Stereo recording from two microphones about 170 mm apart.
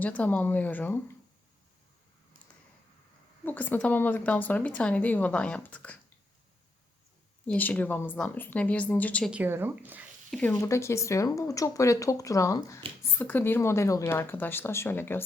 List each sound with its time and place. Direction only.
0.0 s speech: 10° left (ahead or behind)
3.4 s speech: 10° left (ahead or behind)
7.4 s speech: 10° left (ahead or behind)
9.3 s speech: 10° right (ahead or behind)
10.3 s speech: 10° left (ahead or behind)